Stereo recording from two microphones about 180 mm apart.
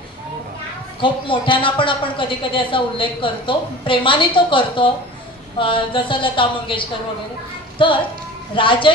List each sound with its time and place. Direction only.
1.0 s a woman's voice: 30° left (ahead or behind)